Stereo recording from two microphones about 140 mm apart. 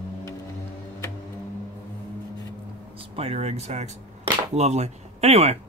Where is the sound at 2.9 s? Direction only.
40° right (ahead or behind).